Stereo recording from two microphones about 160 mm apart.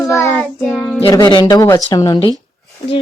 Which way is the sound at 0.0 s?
20° left (ahead or behind).